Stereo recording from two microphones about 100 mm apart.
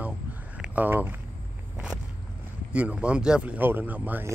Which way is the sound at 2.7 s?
10° right (ahead or behind).